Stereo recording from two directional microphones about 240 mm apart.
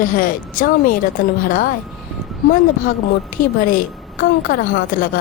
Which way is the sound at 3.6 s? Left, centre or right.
Left.